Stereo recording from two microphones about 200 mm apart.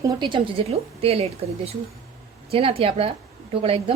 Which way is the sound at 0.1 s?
20° right (ahead or behind).